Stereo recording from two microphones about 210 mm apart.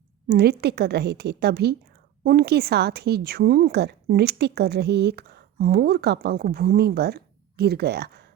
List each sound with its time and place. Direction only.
0.3 s a woman's voice: 50° right (ahead or behind)